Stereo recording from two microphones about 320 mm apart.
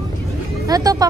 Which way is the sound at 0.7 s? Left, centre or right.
Centre.